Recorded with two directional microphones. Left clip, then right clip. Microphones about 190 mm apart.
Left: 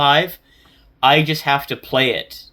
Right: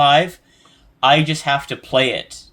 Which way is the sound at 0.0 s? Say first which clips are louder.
Right 1 dB; 20° left (ahead or behind).